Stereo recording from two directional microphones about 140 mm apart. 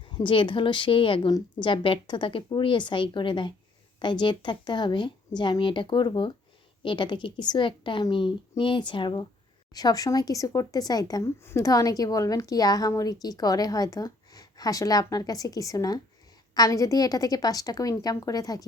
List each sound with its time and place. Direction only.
0.1 s a woman's voice: 35° left (ahead or behind)